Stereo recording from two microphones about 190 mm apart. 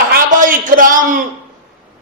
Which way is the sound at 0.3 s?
45° right (ahead or behind).